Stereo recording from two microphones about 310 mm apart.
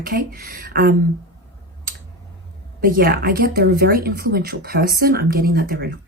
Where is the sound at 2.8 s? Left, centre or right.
Right.